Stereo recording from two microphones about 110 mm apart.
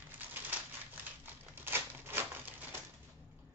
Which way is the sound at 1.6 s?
20° right (ahead or behind).